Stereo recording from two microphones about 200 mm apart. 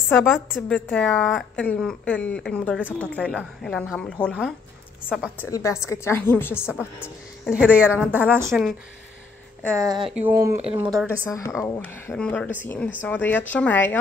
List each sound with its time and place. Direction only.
0.1 s a woman's voice: 10° left (ahead or behind)
5.4 s a woman's voice: 15° left (ahead or behind)
7.4 s a woman's voice: 5° right (ahead or behind)
9.8 s speech: 20° right (ahead or behind)
10.1 s a woman's voice: 10° right (ahead or behind)
10.6 s speech: 25° right (ahead or behind)
11.2 s a woman's voice: 15° left (ahead or behind)